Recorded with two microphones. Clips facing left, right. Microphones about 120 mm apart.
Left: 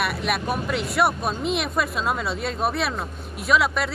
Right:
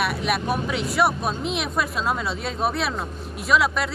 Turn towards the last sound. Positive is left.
turn(degrees=0)  # may be behind; listen again after turning